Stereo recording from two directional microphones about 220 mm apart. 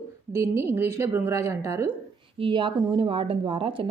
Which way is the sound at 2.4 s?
20° right (ahead or behind).